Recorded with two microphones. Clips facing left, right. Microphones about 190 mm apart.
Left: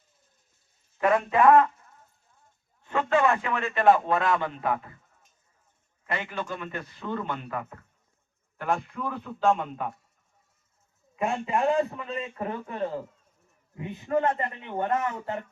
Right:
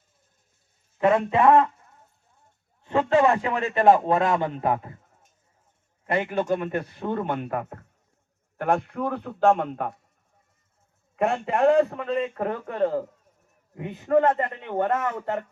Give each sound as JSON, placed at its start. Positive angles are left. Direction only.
{"t": 0.9, "sound": "speech", "side_deg": -25}
{"t": 2.4, "sound": "a man's voice", "side_deg": -35}
{"t": 6.1, "sound": "a man's voice", "side_deg": -55}
{"t": 8.5, "sound": "a man's voice", "side_deg": -65}
{"t": 11.2, "sound": "a man's voice", "side_deg": -65}